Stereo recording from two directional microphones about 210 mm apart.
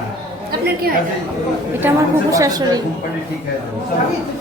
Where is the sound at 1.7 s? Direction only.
15° right (ahead or behind).